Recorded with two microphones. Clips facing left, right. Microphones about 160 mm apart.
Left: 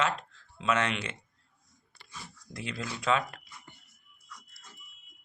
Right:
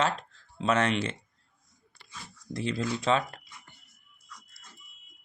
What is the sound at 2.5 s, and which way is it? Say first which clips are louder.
Speech: right 8 dB; 30° right (ahead or behind).